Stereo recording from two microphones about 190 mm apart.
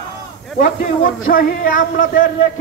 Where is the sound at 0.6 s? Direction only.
45° left (ahead or behind).